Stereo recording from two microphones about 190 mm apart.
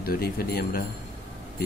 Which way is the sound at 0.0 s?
50° left (ahead or behind).